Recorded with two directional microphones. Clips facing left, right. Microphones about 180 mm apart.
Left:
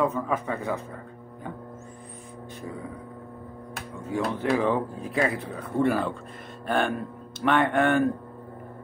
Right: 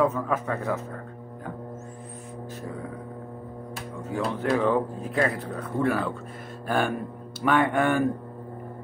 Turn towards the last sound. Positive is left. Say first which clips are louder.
# even
turn(degrees=-10)  # may be behind; listen again after turning